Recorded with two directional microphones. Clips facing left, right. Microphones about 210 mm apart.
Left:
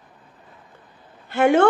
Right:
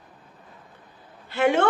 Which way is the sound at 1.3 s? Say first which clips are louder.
Left 5 dB; 50° left (ahead or behind).